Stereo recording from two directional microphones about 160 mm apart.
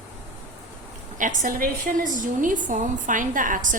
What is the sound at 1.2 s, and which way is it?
A woman's voice, 55° right (ahead or behind).